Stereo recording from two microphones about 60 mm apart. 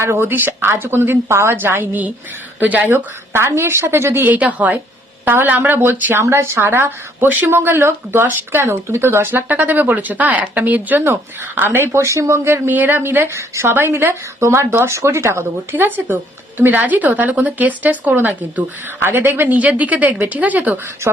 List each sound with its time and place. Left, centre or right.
0.0 s speech: right
1.5 s speech: right
2.9 s speech: right
4.4 s speech: right
5.2 s speech: right
11.9 s speech: right
12.6 s speech: right
14.3 s speech: right